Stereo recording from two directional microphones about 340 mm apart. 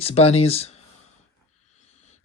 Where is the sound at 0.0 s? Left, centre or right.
Centre.